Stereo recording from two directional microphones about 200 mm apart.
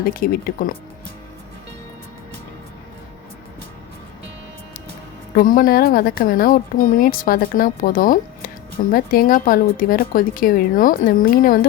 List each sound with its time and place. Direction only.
0.0 s a woman's voice: 45° left (ahead or behind)
5.3 s a woman's voice: 45° left (ahead or behind)